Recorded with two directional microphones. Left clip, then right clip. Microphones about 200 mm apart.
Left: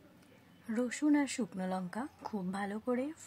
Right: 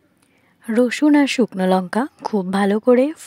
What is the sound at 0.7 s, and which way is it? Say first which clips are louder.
A woman's voice: right 17 dB; 45° right (ahead or behind).